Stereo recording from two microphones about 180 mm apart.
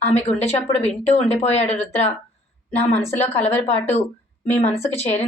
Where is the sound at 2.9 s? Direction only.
10° left (ahead or behind).